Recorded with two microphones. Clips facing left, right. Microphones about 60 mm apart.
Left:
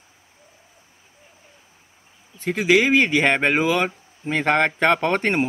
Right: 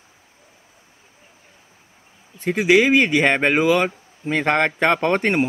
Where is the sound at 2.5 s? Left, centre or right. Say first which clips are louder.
Right 2 dB; right.